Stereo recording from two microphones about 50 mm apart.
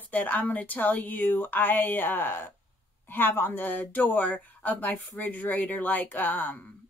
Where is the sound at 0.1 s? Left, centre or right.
Left.